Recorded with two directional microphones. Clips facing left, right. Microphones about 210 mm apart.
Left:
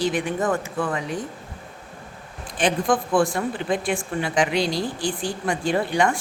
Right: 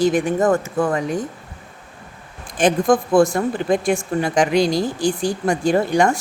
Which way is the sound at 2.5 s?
45° right (ahead or behind).